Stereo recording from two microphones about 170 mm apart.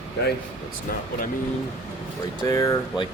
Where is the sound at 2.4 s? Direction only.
20° left (ahead or behind).